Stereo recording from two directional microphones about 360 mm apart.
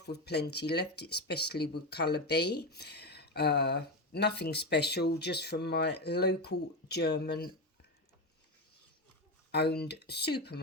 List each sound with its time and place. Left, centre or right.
0.0 s speech: left
9.5 s speech: left